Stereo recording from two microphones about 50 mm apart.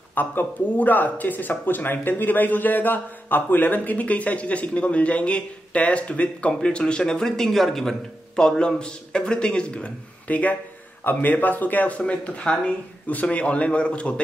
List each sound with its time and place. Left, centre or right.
0.1 s speech: left